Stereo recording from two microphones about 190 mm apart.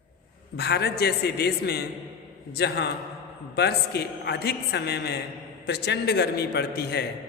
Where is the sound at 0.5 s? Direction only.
60° left (ahead or behind).